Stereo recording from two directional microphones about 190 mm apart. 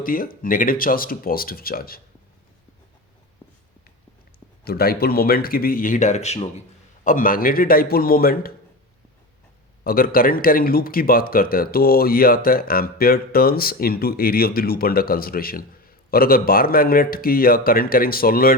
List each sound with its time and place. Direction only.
0.0 s speech: 50° left (ahead or behind)
4.6 s speech: 55° left (ahead or behind); by 6.5 s 35° left (ahead or behind)
7.0 s speech: 45° left (ahead or behind)
9.8 s speech: 50° left (ahead or behind)